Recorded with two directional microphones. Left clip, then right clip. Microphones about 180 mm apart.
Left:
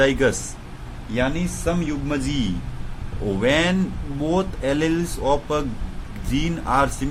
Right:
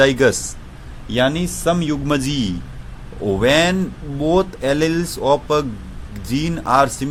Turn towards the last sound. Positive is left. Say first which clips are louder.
# right 5 dB
turn(degrees=-35)  # may be behind; listen again after turning